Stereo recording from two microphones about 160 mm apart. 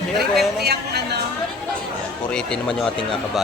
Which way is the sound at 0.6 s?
90° right.